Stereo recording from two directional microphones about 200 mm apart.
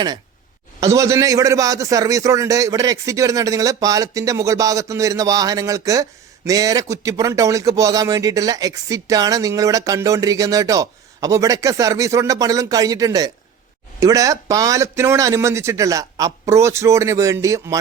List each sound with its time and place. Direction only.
0.8 s a man's voice: 15° right (ahead or behind)